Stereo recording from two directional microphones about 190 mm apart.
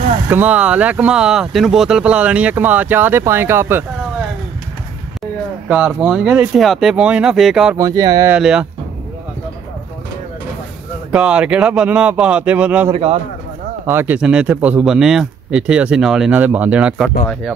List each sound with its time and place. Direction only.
0.3 s speech: 10° right (ahead or behind)
5.7 s speech: 5° right (ahead or behind)
7.7 s speech: 20° right (ahead or behind)
8.3 s speech: 5° right (ahead or behind)
11.1 s speech: 5° right (ahead or behind)
12.9 s a man's voice: 30° right (ahead or behind)
13.8 s speech: 10° right (ahead or behind)